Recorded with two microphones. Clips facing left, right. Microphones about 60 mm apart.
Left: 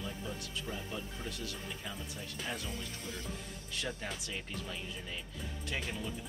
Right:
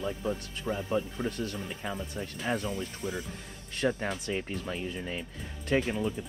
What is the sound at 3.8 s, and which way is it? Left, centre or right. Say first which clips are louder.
Speech: right 11 dB; right.